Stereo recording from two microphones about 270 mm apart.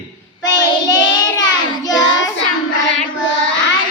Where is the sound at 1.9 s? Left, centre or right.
Left.